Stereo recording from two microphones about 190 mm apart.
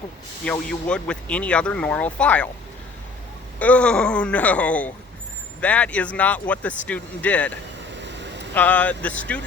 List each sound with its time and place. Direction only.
0.4 s speech: 5° left (ahead or behind)
3.6 s speech: 5° left (ahead or behind)
7.9 s vehicle: 65° right (ahead or behind)
8.5 s speech: 10° left (ahead or behind)